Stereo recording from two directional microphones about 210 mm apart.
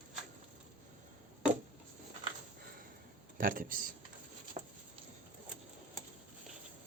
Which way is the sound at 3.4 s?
40° right (ahead or behind).